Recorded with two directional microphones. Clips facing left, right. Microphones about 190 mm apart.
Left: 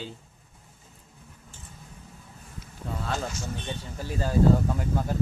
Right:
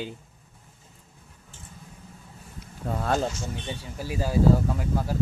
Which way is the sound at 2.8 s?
50° right (ahead or behind).